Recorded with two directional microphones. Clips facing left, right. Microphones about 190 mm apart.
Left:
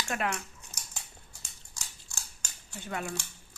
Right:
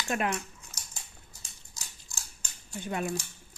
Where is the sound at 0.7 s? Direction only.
70° left (ahead or behind).